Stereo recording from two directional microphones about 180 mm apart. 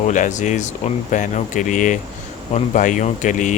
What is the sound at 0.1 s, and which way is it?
Speech, 45° left (ahead or behind).